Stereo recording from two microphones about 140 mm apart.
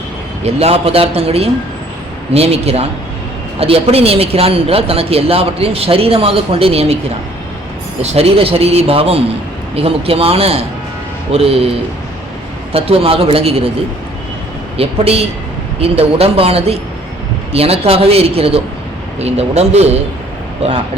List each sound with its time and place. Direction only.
0.4 s a woman's voice: 45° right (ahead or behind)
8.0 s a woman's voice: 45° right (ahead or behind)
12.7 s a woman's voice: 45° right (ahead or behind)
14.8 s a woman's voice: 45° right (ahead or behind)